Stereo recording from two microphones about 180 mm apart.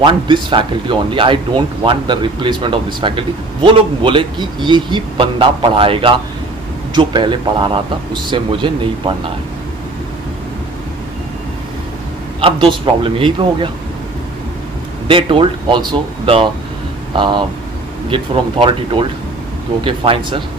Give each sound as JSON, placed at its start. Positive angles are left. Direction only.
{"t": 0.0, "sound": "speech", "side_deg": -25}
{"t": 12.4, "sound": "speech", "side_deg": -30}
{"t": 15.0, "sound": "speech", "side_deg": -30}